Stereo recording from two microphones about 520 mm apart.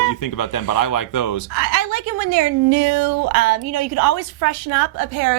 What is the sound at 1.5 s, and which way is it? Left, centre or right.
A woman's voice, right.